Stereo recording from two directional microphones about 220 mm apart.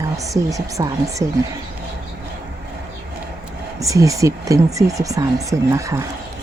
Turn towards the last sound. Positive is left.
turn(degrees=-15)  # may be behind; listen again after turning